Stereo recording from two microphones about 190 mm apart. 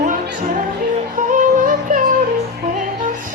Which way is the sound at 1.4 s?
45° right (ahead or behind).